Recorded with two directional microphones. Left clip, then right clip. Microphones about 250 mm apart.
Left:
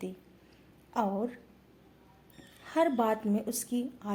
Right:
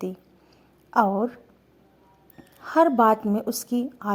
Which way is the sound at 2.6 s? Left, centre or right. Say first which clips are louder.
Right 10 dB; right.